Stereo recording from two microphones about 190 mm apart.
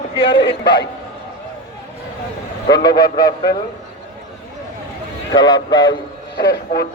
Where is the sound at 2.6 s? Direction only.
20° left (ahead or behind).